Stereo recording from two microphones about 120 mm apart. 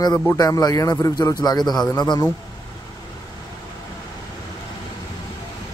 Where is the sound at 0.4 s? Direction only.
30° left (ahead or behind).